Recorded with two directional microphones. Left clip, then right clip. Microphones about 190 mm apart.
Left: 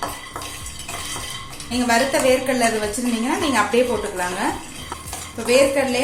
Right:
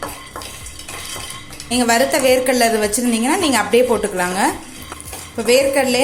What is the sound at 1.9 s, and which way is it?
A woman's voice, 50° right (ahead or behind).